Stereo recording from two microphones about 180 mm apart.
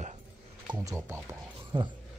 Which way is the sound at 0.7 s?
15° right (ahead or behind).